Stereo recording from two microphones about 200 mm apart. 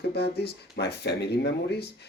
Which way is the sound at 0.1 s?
55° left (ahead or behind).